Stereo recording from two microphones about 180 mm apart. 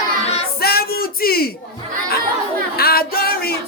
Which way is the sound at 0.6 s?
60° left (ahead or behind).